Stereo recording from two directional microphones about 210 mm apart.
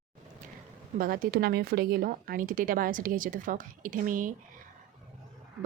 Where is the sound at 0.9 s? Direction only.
40° right (ahead or behind).